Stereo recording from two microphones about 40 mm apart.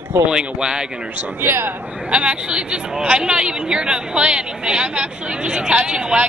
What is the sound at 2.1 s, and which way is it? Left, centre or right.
Speech, right.